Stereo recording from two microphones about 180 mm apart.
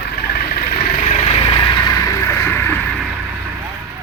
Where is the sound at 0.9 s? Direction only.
40° left (ahead or behind); by 2.9 s 10° left (ahead or behind).